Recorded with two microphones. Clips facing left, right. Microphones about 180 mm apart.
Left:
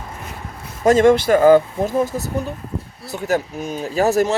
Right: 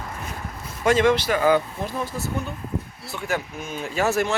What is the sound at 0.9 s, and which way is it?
Speech, 45° left (ahead or behind).